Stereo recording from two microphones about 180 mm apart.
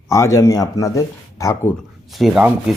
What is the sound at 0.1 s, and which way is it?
Speech, 15° left (ahead or behind).